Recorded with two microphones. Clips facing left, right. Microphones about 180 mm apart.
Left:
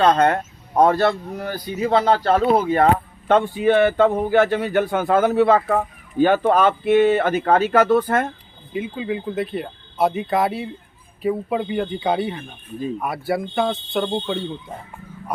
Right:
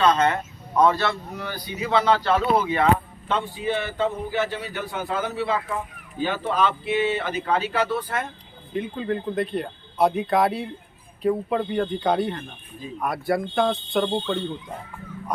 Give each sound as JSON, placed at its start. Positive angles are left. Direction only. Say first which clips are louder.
{"t": 0.0, "sound": "speech", "louder": "left 4 dB", "side_deg": 55}
{"t": 8.7, "sound": "speech", "louder": "left 1 dB", "side_deg": 5}